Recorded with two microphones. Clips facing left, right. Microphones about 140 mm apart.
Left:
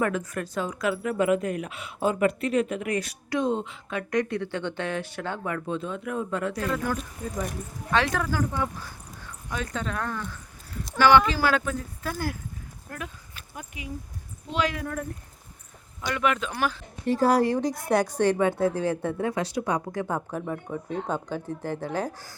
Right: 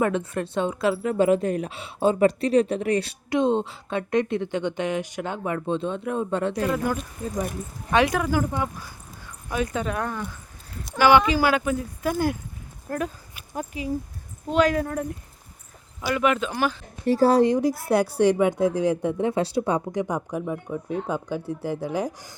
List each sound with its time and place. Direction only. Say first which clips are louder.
0.0 s speech: right 3 dB; 25° right (ahead or behind)
7.9 s a woman's voice: right 4 dB; 15° right (ahead or behind)
12.9 s speech: right 10 dB; 35° right (ahead or behind)
16.0 s speech: right 4 dB; 5° right (ahead or behind)
17.1 s speech: right 4 dB; 30° right (ahead or behind)
17.6 s a woman's voice: right 3 dB; 5° right (ahead or behind)